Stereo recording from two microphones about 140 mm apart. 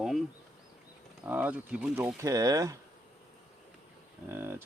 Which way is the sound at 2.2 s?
25° right (ahead or behind).